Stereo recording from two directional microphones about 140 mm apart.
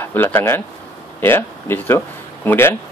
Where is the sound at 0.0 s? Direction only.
15° left (ahead or behind).